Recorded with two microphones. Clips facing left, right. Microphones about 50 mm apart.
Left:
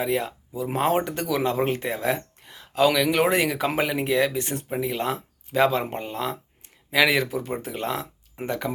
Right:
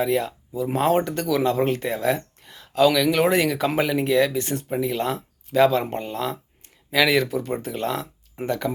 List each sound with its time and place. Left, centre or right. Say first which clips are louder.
0.0 s speech: right 3 dB; centre